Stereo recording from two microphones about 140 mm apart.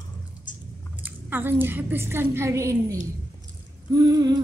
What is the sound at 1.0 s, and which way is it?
A woman's voice, 15° right (ahead or behind).